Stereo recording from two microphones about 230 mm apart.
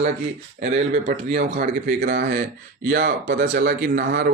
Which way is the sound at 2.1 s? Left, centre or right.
Right.